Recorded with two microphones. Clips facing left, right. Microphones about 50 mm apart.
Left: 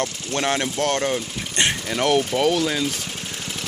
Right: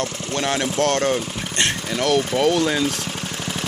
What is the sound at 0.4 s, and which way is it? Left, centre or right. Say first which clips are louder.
Speech: right 1 dB; centre.